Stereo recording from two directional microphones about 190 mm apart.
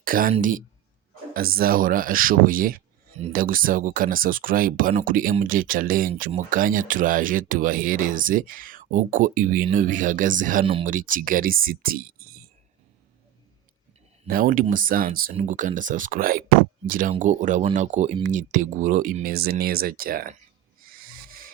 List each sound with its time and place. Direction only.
0.0 s speech: 50° right (ahead or behind)
14.3 s speech: 50° right (ahead or behind)
20.9 s owl: 50° right (ahead or behind)